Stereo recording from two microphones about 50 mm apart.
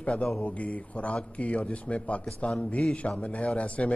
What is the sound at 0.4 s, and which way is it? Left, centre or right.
Speech, left.